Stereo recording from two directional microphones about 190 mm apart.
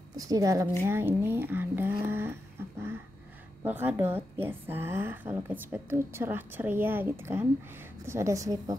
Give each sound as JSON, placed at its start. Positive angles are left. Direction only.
{"t": 0.1, "sound": "a woman's voice", "side_deg": -20}
{"t": 3.6, "sound": "a woman's voice", "side_deg": -10}